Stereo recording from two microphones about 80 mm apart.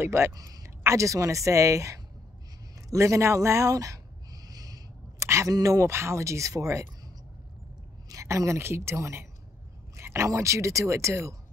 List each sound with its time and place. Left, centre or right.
0.0 s speech: right
0.3 s speech: right
2.9 s a sound: right
5.3 s speech: right
8.1 s a woman's voice: right